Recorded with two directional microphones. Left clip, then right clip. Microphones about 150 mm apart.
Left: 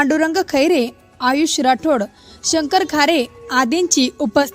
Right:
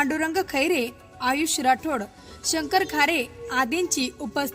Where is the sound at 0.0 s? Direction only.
40° left (ahead or behind).